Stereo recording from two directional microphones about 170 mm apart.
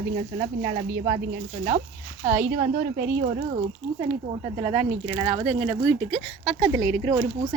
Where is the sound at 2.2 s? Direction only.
40° right (ahead or behind).